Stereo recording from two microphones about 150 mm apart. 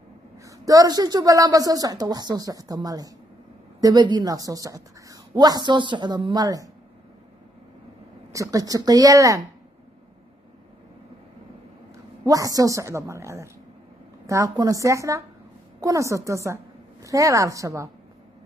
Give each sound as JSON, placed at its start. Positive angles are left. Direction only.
{"t": 0.5, "sound": "a woman's voice", "side_deg": -25}
{"t": 8.3, "sound": "a woman's voice", "side_deg": -20}
{"t": 12.3, "sound": "a woman's voice", "side_deg": -25}